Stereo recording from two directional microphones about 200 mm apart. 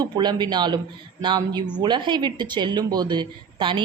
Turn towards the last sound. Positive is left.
turn(degrees=-25)  # may be behind; listen again after turning